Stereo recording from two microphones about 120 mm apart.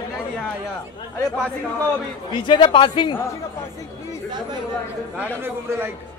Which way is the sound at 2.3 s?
40° left (ahead or behind).